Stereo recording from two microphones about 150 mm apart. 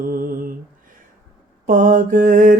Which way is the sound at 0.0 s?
70° right (ahead or behind).